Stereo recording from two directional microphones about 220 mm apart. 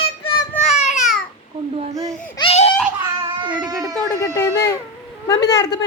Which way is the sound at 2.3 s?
25° left (ahead or behind).